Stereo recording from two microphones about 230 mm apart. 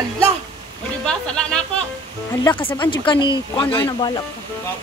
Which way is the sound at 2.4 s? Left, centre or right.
Left.